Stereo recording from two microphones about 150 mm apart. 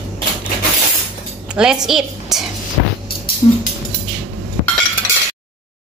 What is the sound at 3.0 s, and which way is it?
Music, 90° left.